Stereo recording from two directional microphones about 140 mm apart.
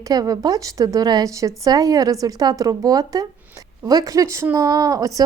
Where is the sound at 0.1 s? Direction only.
25° right (ahead or behind).